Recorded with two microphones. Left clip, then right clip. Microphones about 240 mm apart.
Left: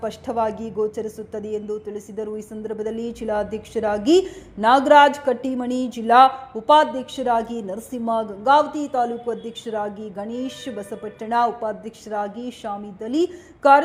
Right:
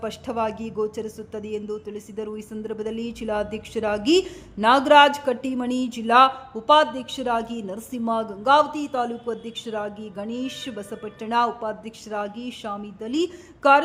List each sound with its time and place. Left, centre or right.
0.0 s speech: centre